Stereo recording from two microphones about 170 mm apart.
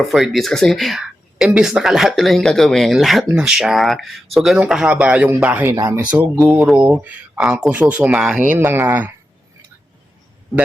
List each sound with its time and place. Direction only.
0.0 s speech: centre (ahead or behind); by 6.0 s 20° right (ahead or behind)
6.0 s speech: 10° right (ahead or behind)